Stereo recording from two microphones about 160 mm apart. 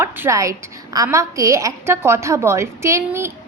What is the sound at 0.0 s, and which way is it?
A woman's voice, 15° right (ahead or behind).